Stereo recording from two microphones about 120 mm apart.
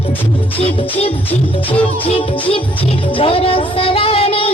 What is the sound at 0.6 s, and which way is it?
Music, 55° left (ahead or behind).